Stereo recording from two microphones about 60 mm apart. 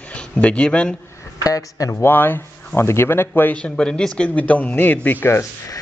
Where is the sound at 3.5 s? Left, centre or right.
Centre.